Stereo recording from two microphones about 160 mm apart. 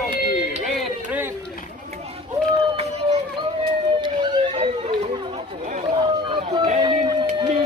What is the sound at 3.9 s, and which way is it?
Chatter, 30° right (ahead or behind).